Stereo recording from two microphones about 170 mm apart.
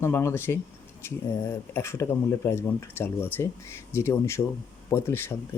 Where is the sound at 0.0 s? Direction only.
15° left (ahead or behind).